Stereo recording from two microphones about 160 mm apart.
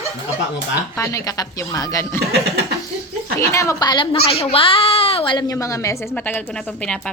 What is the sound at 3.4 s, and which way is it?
Speech, 20° left (ahead or behind).